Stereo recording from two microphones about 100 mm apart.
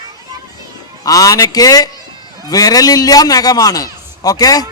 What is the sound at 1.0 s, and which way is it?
A man's voice, 35° left (ahead or behind).